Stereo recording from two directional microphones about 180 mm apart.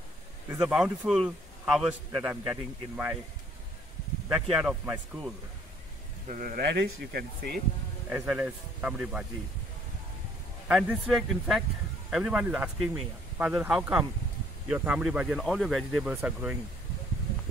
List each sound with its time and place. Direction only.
0.5 s speech: 5° right (ahead or behind)
2.1 s a man's voice: 15° right (ahead or behind)
4.3 s speech: 5° right (ahead or behind)
6.2 s speech: 50° right (ahead or behind)
8.1 s a man's voice: 10° right (ahead or behind)
11.1 s a man's voice: centre (ahead or behind)